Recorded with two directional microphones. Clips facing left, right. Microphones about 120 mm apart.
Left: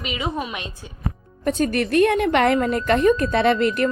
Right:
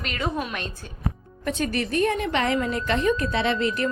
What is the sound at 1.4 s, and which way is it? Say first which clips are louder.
Speech: left 5 dB; 40° left (ahead or behind).